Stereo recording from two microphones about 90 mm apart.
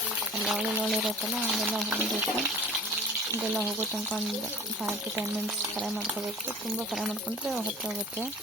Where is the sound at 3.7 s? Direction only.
25° right (ahead or behind).